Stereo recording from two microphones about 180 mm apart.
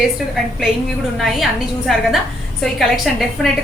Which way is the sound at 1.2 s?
Centre (ahead or behind).